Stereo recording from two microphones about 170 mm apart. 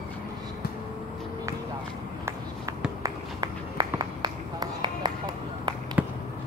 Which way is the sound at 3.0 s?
25° right (ahead or behind).